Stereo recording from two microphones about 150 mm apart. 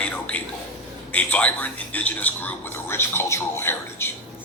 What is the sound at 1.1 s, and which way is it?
A man's voice, 10° left (ahead or behind).